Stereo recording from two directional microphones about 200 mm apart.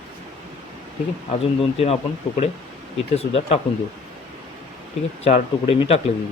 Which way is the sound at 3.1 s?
30° left (ahead or behind).